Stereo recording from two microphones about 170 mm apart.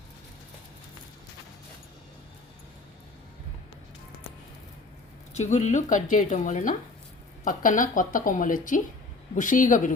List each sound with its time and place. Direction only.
5.3 s a woman's voice: 40° left (ahead or behind)